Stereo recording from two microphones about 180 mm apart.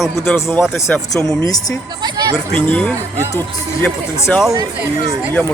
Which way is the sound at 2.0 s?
25° right (ahead or behind).